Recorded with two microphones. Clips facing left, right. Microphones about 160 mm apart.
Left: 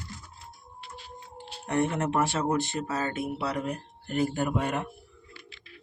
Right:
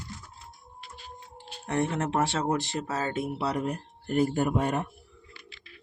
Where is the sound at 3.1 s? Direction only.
40° right (ahead or behind).